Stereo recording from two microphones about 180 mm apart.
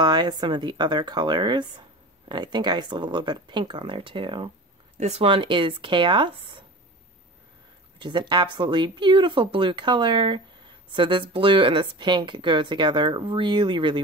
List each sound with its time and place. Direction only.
0.0 s speech: 25° right (ahead or behind)
8.0 s speech: 25° right (ahead or behind)